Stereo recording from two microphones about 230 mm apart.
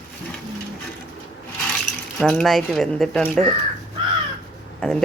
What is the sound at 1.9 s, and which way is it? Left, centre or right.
Water, left.